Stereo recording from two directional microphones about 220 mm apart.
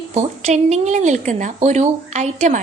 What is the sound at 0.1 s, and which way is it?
A woman's voice, 30° right (ahead or behind).